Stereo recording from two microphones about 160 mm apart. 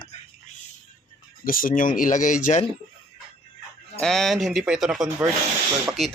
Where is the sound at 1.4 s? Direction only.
60° left (ahead or behind).